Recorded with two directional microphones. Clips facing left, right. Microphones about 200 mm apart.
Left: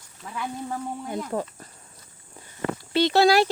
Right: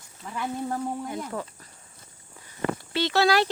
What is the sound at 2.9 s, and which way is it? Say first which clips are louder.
Speech: left 4 dB; 15° left (ahead or behind).